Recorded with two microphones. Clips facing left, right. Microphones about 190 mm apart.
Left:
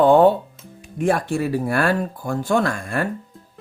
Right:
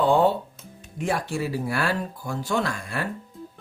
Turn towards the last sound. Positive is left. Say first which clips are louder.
# left 6 dB
turn(degrees=50)  # may be behind; listen again after turning